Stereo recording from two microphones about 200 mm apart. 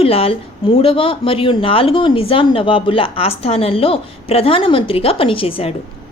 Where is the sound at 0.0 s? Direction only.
30° left (ahead or behind).